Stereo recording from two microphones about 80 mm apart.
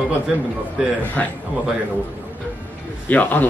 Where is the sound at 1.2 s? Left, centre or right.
Centre.